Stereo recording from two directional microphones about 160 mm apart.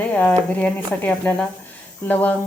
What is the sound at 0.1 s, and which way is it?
A woman's voice, 10° left (ahead or behind).